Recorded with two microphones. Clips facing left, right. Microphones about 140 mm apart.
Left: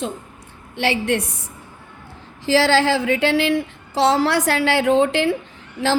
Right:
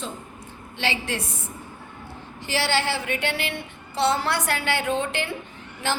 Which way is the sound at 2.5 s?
90° left.